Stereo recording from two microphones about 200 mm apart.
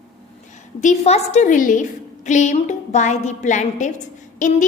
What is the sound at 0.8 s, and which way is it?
A woman's voice, 35° left (ahead or behind).